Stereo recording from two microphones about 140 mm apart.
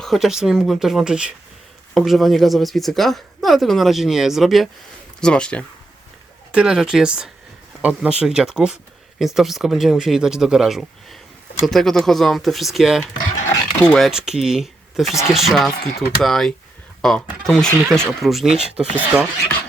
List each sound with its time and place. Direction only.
0.0 s speech: centre (ahead or behind)
6.5 s speech: 5° right (ahead or behind)
14.1 s speech: 5° right (ahead or behind)
15.1 s speech: 20° left (ahead or behind)
15.4 s speech: centre (ahead or behind)